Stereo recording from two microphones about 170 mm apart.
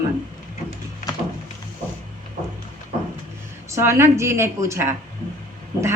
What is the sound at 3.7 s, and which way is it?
A woman's voice, 15° right (ahead or behind).